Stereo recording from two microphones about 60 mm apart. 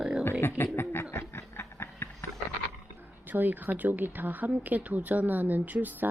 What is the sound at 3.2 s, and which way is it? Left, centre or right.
A woman's voice, right.